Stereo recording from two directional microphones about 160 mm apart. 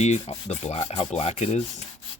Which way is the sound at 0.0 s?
45° left (ahead or behind).